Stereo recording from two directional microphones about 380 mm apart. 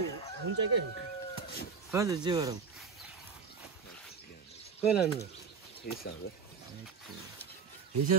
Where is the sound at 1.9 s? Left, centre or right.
Centre.